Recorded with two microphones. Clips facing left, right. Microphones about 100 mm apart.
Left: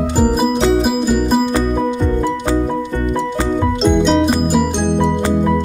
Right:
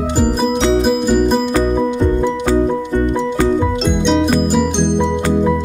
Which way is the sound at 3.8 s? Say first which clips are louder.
Left 4 dB; centre (ahead or behind).